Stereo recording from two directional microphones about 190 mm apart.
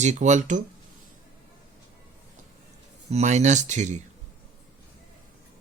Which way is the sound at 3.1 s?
35° right (ahead or behind).